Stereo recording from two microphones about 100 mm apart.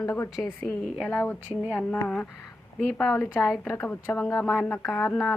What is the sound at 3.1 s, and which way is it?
A woman's voice, 25° left (ahead or behind).